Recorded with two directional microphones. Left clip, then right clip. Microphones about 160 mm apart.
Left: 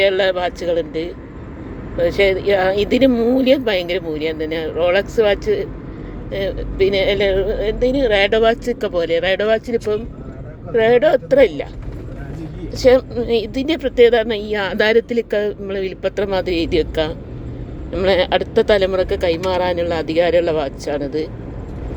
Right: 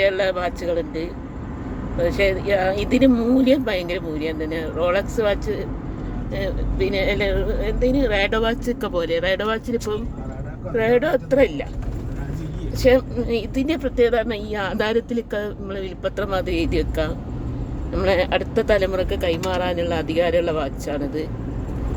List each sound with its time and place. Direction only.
0.0 s speech: 15° left (ahead or behind)
12.7 s speech: 10° left (ahead or behind)